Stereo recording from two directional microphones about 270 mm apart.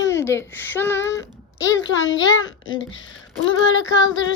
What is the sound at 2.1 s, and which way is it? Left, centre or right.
Female singing, left.